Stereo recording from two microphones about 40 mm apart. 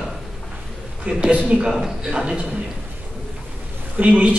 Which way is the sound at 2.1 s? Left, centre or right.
Right.